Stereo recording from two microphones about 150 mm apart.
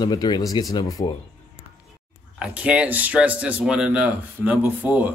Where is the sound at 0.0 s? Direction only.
25° left (ahead or behind).